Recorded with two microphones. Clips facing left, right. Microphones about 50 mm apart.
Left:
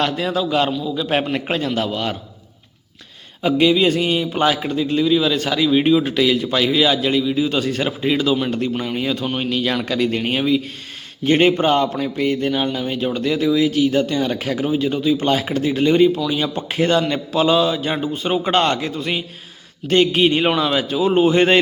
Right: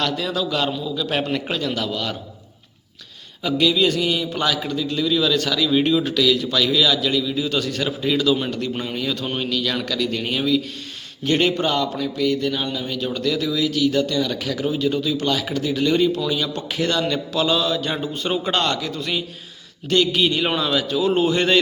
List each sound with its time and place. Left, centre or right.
0.0 s speech: left
3.4 s speech: left
6.1 s a man's voice: left
14.6 s a man's voice: centre